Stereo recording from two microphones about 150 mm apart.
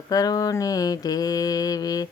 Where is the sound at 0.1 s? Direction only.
25° left (ahead or behind).